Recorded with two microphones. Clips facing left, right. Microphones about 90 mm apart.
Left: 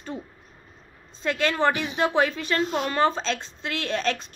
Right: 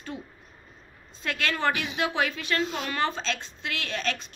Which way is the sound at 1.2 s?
25° left (ahead or behind).